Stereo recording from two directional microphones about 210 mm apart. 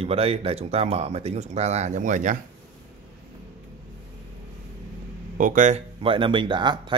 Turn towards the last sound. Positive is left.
turn(degrees=-20)  # may be behind; listen again after turning